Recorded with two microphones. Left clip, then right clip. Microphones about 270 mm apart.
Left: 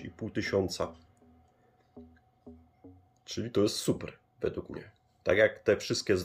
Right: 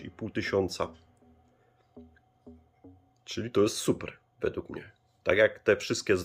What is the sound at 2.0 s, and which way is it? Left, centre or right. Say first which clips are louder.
Music: even; centre.